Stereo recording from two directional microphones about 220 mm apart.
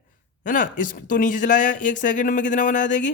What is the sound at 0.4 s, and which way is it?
Speech, 35° left (ahead or behind).